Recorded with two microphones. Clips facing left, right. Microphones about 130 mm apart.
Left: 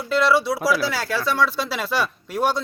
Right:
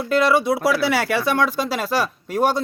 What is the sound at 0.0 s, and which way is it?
Speech, 50° right (ahead or behind).